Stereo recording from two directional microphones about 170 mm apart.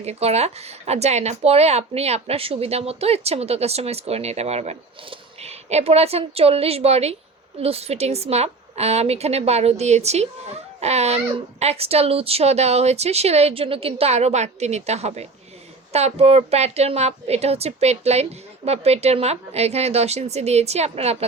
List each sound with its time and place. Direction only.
0.0 s a woman's voice: 40° right (ahead or behind)